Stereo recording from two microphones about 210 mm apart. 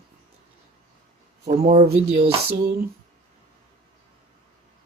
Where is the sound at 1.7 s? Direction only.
30° right (ahead or behind).